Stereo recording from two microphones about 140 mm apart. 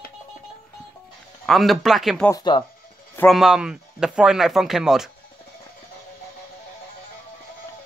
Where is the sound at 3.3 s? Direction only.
5° right (ahead or behind).